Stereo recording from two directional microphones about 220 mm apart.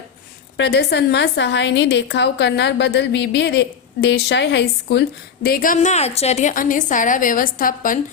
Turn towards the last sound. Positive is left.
turn(degrees=40)  # may be behind; listen again after turning